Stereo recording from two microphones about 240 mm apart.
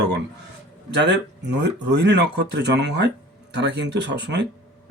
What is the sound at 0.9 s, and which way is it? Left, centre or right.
Speech, right.